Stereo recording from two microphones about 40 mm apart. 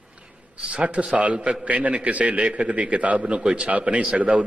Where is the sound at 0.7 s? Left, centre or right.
Right.